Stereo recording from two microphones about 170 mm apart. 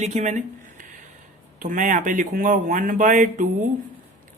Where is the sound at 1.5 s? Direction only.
50° right (ahead or behind).